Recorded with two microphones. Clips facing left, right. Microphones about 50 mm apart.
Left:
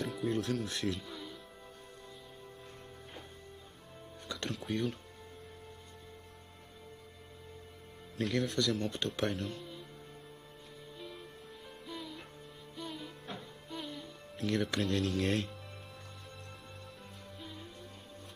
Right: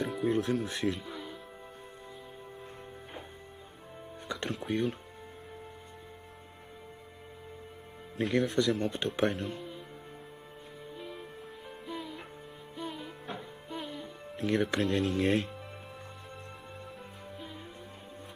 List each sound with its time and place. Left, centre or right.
0.0 s speech: centre
4.5 s speech: centre
8.2 s speech: centre
9.2 s speech: centre
9.6 s music: right
11.0 s music: right
14.8 s speech: centre